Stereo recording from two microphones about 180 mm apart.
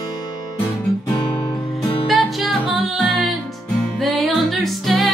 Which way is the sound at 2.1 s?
Centre (ahead or behind).